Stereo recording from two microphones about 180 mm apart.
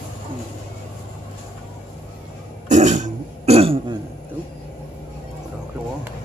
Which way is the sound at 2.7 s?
40° right (ahead or behind).